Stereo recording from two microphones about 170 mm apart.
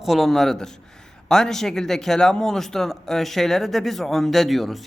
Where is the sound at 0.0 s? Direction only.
Centre (ahead or behind).